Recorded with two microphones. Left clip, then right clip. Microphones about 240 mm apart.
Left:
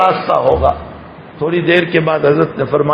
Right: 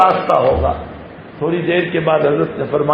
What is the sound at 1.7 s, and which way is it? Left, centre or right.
Speech, left.